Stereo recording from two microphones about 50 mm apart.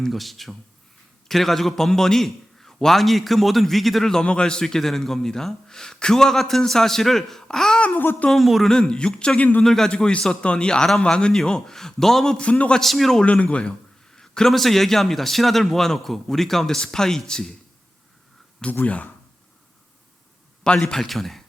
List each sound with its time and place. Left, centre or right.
0.1 s a man's voice: centre
4.2 s speech: centre
8.3 s a man's voice: centre
8.7 s speech: centre
9.9 s speech: left
12.4 s speech: left
12.8 s a man's voice: centre
13.2 s speech: left
14.2 s speech: centre
18.9 s speech: left
20.7 s a man's voice: centre